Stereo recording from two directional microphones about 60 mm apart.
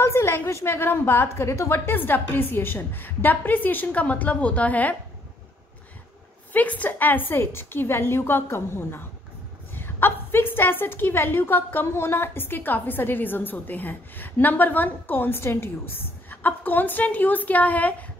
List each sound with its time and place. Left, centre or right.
0.0 s a sound: left
0.5 s a woman's voice: left
6.5 s a woman's voice: left